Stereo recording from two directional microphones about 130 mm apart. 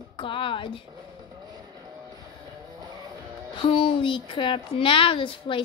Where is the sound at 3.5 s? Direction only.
40° left (ahead or behind).